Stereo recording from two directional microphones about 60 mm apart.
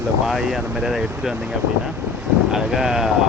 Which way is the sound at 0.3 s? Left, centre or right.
Centre.